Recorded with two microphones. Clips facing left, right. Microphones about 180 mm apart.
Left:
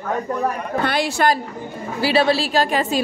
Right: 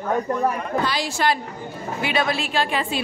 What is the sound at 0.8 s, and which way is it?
Speech, 60° left (ahead or behind).